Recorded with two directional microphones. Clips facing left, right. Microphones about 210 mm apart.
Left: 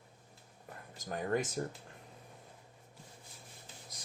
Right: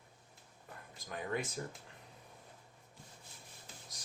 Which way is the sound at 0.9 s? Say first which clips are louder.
Left 5 dB; 45° left (ahead or behind).